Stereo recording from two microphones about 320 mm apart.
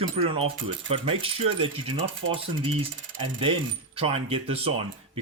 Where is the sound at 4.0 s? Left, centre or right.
Centre.